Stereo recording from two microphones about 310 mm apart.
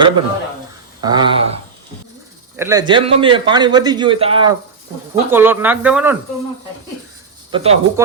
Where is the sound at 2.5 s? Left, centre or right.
Centre.